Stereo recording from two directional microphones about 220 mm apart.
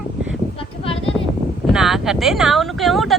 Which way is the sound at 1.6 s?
Centre (ahead or behind).